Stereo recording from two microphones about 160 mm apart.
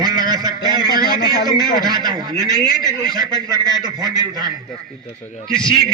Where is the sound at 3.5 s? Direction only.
25° right (ahead or behind).